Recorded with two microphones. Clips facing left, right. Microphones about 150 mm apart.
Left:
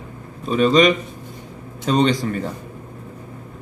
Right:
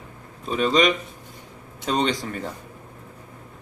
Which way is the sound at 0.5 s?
10° right (ahead or behind).